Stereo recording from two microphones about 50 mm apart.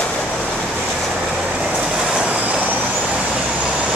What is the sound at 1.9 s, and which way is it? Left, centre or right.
Train, centre.